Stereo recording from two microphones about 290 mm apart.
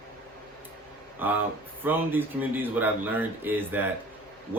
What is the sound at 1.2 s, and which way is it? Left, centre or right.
A man's voice, centre.